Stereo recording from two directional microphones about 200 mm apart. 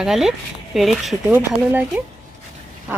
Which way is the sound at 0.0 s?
Centre (ahead or behind).